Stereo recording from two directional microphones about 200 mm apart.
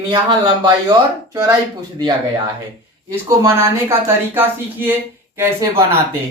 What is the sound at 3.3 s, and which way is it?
Speech, 15° right (ahead or behind).